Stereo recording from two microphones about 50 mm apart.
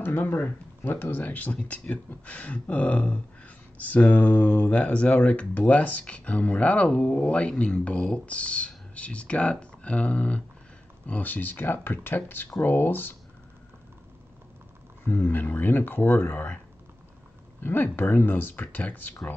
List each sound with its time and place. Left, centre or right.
0.0 s speech: left
11.1 s speech: left
15.0 s speech: left
17.6 s speech: left